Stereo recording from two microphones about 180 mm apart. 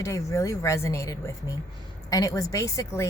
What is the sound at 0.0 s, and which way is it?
A woman's voice, 15° left (ahead or behind).